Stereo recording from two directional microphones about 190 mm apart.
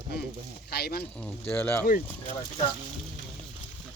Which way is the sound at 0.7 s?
55° left (ahead or behind).